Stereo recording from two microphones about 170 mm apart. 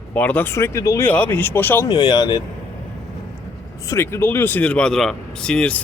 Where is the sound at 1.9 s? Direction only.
25° left (ahead or behind).